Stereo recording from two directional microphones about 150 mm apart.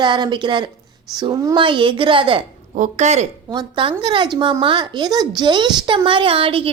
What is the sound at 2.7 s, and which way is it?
Speech, 55° right (ahead or behind).